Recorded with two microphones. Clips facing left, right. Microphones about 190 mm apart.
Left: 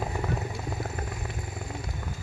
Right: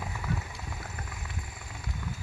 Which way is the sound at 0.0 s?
40° left (ahead or behind).